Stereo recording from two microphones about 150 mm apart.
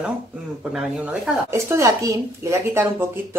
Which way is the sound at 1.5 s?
20° right (ahead or behind).